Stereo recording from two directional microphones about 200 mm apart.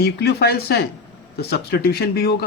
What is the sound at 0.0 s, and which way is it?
Speech, 55° left (ahead or behind).